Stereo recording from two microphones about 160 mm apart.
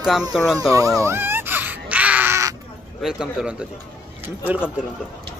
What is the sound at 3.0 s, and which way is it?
Speech, 5° right (ahead or behind).